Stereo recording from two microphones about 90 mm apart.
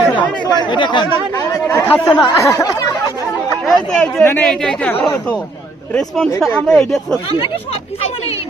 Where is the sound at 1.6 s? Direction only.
20° left (ahead or behind).